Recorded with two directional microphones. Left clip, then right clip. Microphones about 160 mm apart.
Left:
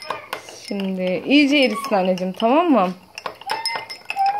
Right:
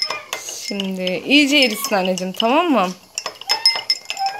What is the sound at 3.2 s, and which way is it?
Doorbell, 20° left (ahead or behind).